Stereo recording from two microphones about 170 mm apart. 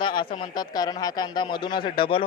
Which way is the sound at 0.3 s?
25° left (ahead or behind).